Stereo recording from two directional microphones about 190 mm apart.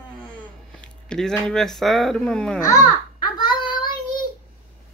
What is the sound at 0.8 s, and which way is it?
Speech, 5° left (ahead or behind).